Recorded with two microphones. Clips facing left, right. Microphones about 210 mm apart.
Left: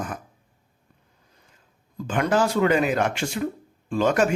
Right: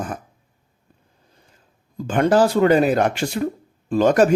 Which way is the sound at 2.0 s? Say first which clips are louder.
Right 6 dB; 35° right (ahead or behind).